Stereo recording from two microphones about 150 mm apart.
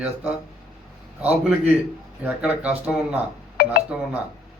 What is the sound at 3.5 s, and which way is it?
Music, 85° left.